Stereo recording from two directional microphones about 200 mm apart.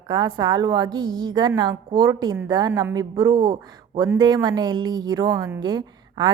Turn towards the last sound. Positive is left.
turn(degrees=-20)  # may be behind; listen again after turning